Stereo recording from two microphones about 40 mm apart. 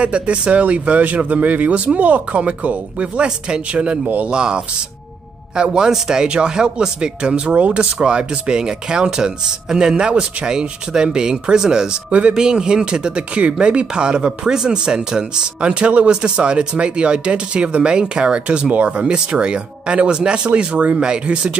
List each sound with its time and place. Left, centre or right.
0.0 s speech: right
3.3 s speech: right
12.1 s speech: right
12.4 s speech: centre